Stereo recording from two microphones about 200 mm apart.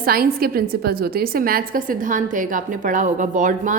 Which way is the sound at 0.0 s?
50° right (ahead or behind).